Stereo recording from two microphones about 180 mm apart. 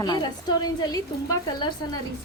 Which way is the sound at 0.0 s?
25° left (ahead or behind).